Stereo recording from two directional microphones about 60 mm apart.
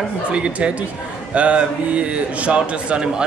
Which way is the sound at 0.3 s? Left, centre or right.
Centre.